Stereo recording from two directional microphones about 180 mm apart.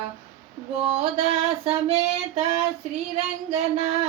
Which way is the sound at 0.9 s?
35° right (ahead or behind).